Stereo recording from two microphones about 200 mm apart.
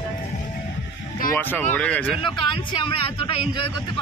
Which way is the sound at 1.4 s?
10° left (ahead or behind).